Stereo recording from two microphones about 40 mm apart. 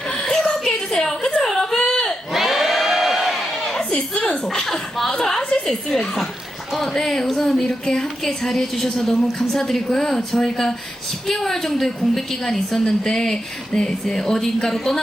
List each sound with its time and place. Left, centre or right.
0.1 s a sound: centre
1.4 s whimper: centre
2.3 s crowd: centre
3.8 s a sound: left
4.4 s a woman's voice: centre
6.7 s speech: centre
6.9 s a woman's voice: centre